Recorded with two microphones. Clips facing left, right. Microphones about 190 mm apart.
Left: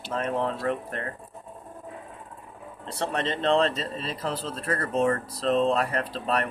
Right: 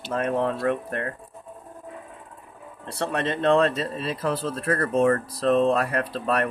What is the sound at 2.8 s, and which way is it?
Speech, 60° right (ahead or behind).